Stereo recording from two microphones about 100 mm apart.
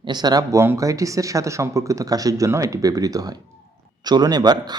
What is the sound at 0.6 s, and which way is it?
A man's voice, 30° right (ahead or behind).